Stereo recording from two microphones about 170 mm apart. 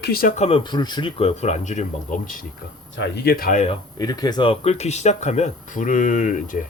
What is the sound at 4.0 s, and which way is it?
Speech, 20° left (ahead or behind).